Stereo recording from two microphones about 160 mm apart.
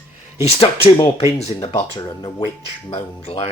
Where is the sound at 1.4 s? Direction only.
40° left (ahead or behind).